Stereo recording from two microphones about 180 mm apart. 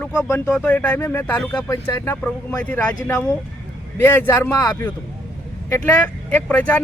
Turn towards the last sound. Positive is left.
turn(degrees=10)  # may be behind; listen again after turning